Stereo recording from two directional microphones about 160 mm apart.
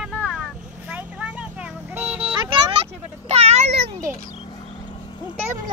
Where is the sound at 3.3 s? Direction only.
40° right (ahead or behind).